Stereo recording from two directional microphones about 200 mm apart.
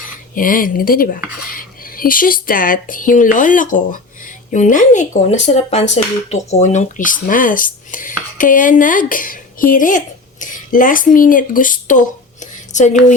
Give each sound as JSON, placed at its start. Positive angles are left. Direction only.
{"t": 0.3, "sound": "speech", "side_deg": 45}